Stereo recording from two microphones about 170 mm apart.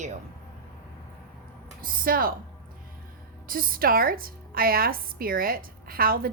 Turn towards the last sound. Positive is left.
turn(degrees=-60)  # may be behind; listen again after turning